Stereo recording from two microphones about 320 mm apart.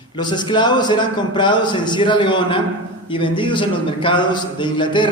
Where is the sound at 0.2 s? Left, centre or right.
Centre.